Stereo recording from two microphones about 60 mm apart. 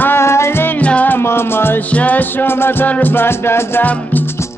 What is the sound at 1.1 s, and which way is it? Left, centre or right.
Music, left.